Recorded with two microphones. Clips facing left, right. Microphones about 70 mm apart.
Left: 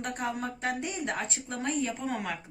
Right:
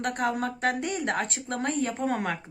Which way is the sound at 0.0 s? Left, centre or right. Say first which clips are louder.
Right 5 dB; right.